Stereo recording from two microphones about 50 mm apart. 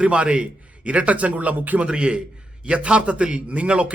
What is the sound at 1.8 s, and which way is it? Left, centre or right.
A man's voice, centre.